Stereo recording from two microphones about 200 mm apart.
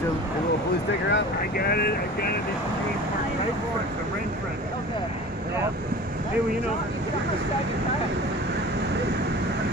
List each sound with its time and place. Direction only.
1.1 s speech: 50° left (ahead or behind)